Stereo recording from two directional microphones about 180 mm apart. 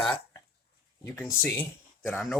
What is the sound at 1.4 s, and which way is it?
Speech, 10° left (ahead or behind).